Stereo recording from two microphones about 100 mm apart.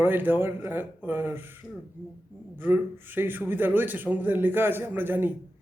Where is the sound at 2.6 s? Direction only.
20° right (ahead or behind).